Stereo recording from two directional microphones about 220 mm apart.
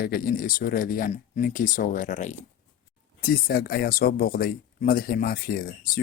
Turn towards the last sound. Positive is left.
turn(degrees=45)  # may be behind; listen again after turning